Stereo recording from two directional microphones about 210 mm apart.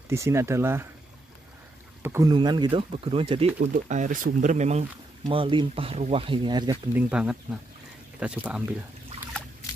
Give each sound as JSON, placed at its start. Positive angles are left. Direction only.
{"t": 0.1, "sound": "speech", "side_deg": -15}
{"t": 2.0, "sound": "speech", "side_deg": -15}
{"t": 3.5, "sound": "speech", "side_deg": -40}